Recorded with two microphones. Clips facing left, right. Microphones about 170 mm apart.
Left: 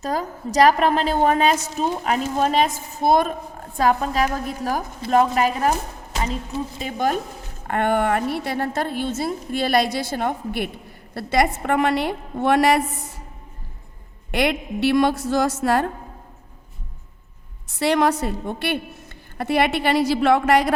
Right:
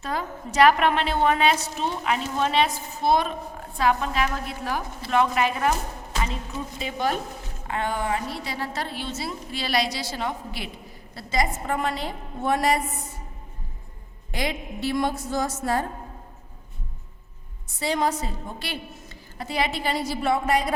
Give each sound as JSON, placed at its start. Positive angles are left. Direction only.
{"t": 0.0, "sound": "a woman's voice", "side_deg": 40}
{"t": 6.7, "sound": "a woman's voice", "side_deg": 45}
{"t": 7.7, "sound": "a woman's voice", "side_deg": 60}
{"t": 11.1, "sound": "a woman's voice", "side_deg": 65}
{"t": 14.3, "sound": "a woman's voice", "side_deg": 70}
{"t": 17.7, "sound": "a woman's voice", "side_deg": 75}